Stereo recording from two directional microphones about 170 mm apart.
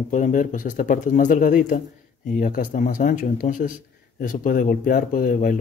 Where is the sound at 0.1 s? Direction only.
50° left (ahead or behind).